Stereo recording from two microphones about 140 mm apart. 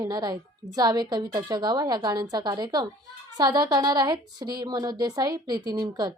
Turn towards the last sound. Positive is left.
turn(degrees=-30)  # may be behind; listen again after turning